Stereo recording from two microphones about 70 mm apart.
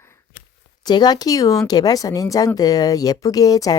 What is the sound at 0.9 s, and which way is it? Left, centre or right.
Speech, left.